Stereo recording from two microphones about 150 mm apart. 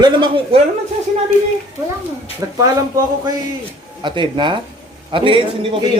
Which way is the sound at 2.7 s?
25° right (ahead or behind).